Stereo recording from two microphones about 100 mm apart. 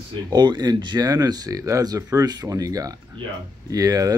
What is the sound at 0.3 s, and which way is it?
Speech, 45° right (ahead or behind).